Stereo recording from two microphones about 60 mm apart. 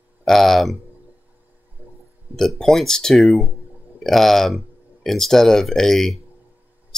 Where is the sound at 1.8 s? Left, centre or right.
Right.